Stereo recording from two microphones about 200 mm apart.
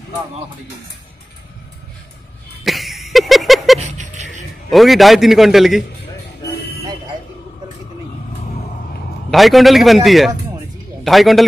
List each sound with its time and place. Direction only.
2.6 s a sound: centre (ahead or behind)
3.8 s music: 35° right (ahead or behind)
4.6 s a man's voice: centre (ahead or behind)
9.3 s a man's voice: centre (ahead or behind)